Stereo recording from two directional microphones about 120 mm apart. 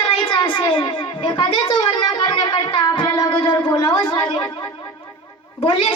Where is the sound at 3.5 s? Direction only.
20° left (ahead or behind).